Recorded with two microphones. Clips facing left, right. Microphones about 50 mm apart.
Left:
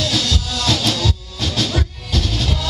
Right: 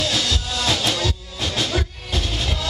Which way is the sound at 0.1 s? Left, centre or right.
Centre.